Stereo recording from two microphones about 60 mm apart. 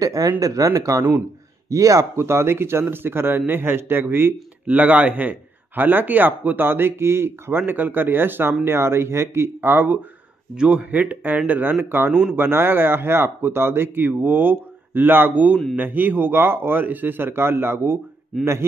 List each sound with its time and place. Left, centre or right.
0.0 s speech: right
0.4 s speech: right
2.1 s a man's voice: right
4.6 s a man's voice: right
10.5 s a man's voice: centre; by 18.7 s right